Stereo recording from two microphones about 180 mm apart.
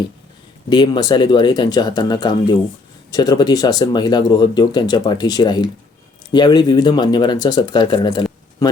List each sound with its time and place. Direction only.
0.7 s speech: 25° left (ahead or behind)